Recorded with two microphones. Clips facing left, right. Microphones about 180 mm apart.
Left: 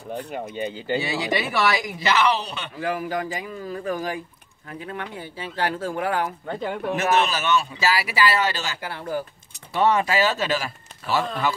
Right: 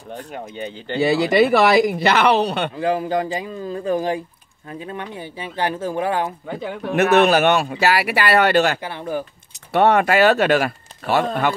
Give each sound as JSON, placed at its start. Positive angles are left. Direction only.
{"t": 0.3, "sound": "speech", "side_deg": 5}
{"t": 0.9, "sound": "speech", "side_deg": -60}
{"t": 2.8, "sound": "speech", "side_deg": -25}
{"t": 6.4, "sound": "speech", "side_deg": -5}
{"t": 7.0, "sound": "speech", "side_deg": -60}
{"t": 8.8, "sound": "speech", "side_deg": -20}
{"t": 9.7, "sound": "speech", "side_deg": -60}